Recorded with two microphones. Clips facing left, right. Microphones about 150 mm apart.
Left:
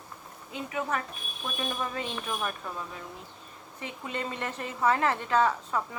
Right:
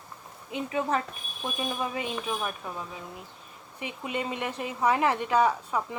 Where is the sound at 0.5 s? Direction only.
25° right (ahead or behind).